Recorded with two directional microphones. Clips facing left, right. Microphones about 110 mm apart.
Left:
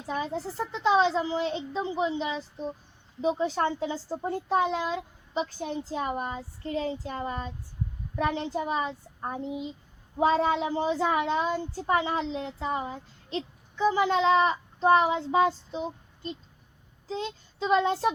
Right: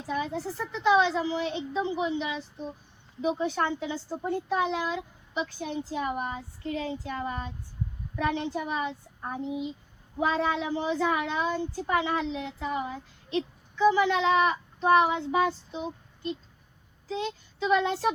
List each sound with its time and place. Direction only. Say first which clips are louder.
0.1 s a child's voice: even; 30° left (ahead or behind)
7.0 s child singing: even; 30° left (ahead or behind)
8.1 s a child's voice: left 1 dB; 30° left (ahead or behind)